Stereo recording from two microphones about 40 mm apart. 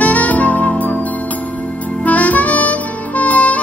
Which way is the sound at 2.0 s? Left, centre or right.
Left.